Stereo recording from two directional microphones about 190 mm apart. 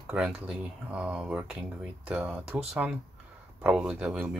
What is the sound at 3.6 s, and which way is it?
Speech, 5° right (ahead or behind).